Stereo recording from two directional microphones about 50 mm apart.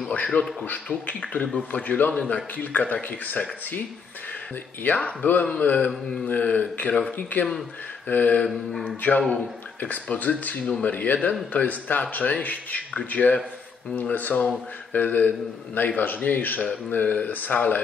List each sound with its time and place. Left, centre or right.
0.3 s speech: centre
0.7 s speech: left
4.8 s speech: left
9.8 s speech: left